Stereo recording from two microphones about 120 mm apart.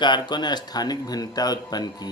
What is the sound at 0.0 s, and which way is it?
Speech, 40° left (ahead or behind).